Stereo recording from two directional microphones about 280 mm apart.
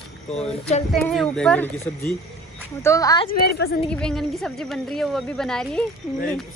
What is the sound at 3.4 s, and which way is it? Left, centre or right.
Speech, left.